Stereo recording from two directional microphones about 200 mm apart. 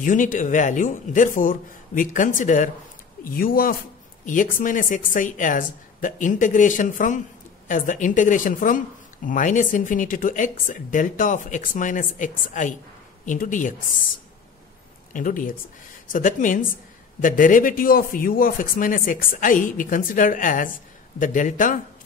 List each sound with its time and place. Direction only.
0.0 s a woman's voice: 40° left (ahead or behind)
15.1 s a woman's voice: 40° left (ahead or behind)